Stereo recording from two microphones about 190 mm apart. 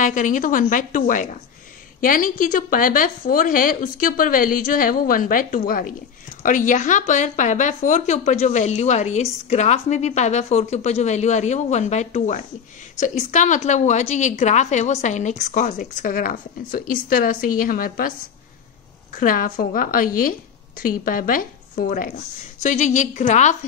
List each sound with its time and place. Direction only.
0.0 s a woman's voice: 45° left (ahead or behind)
19.1 s a woman's voice: 45° left (ahead or behind)